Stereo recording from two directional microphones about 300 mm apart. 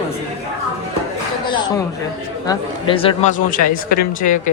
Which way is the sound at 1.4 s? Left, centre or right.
Centre.